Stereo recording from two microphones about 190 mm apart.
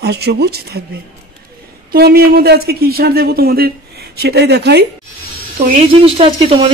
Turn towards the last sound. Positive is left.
turn(degrees=-30)  # may be behind; listen again after turning